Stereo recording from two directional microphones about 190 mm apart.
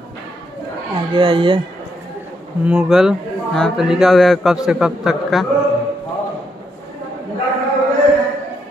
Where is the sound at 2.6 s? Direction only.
5° right (ahead or behind).